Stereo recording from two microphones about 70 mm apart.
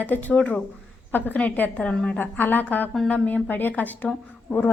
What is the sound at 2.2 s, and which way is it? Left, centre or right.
Speech, left.